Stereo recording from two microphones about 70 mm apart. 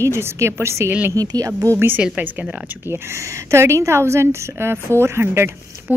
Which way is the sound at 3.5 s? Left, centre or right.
Right.